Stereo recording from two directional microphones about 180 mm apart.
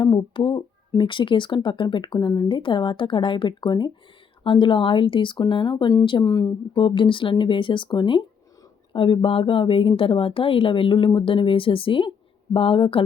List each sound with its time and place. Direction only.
0.0 s speech: 25° left (ahead or behind)